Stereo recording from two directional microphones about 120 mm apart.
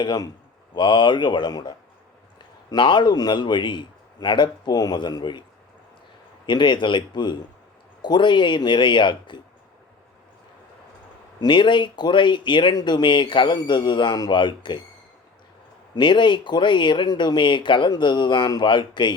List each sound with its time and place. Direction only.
0.0 s speech: 35° left (ahead or behind)
11.3 s speech: 40° left (ahead or behind)
16.0 s speech: 40° left (ahead or behind)